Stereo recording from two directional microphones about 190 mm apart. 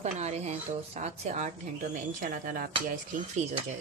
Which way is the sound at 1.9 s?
45° right (ahead or behind).